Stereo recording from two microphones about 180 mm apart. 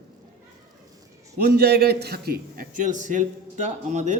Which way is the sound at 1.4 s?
60° right (ahead or behind).